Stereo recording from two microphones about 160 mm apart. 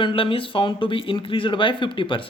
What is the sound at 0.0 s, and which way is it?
Speech, 30° left (ahead or behind).